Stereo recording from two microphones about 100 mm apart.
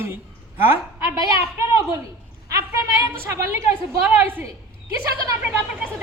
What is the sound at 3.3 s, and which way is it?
Speech, 30° right (ahead or behind).